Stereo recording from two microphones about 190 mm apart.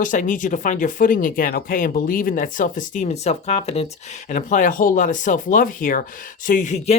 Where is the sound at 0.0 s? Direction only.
45° left (ahead or behind).